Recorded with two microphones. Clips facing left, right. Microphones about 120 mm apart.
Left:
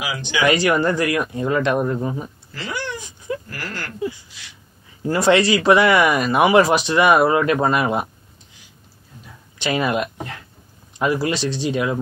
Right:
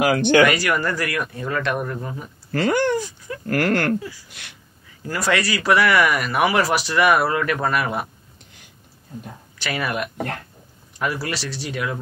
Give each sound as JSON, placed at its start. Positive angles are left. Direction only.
{"t": 0.0, "sound": "speech", "side_deg": -55}
{"t": 0.5, "sound": "speech", "side_deg": 25}
{"t": 2.5, "sound": "speech", "side_deg": -50}
{"t": 3.0, "sound": "a sound", "side_deg": 20}
{"t": 3.4, "sound": "speech", "side_deg": -60}
{"t": 5.0, "sound": "speech", "side_deg": 25}
{"t": 9.6, "sound": "speech", "side_deg": 20}